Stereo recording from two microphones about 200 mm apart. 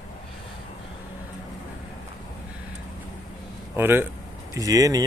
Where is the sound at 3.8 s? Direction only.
10° right (ahead or behind).